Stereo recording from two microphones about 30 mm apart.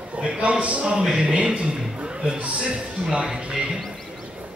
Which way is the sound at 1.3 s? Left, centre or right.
Right.